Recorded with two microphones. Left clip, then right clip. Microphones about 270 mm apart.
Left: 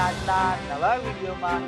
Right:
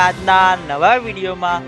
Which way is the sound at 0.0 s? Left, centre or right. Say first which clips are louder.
Right 11 dB; right.